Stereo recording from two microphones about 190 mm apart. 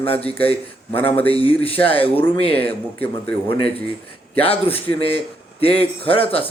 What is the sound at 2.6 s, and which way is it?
Speech, 10° left (ahead or behind).